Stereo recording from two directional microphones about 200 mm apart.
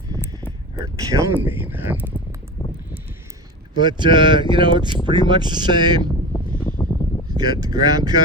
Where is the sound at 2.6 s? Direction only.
15° left (ahead or behind).